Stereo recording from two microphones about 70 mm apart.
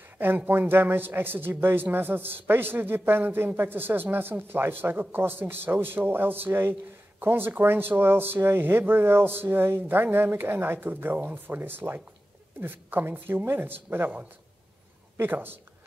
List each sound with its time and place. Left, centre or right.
0.5 s a man's voice: right